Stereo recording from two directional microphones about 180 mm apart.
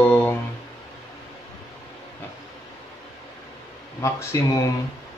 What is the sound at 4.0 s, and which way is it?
Speech, 15° left (ahead or behind).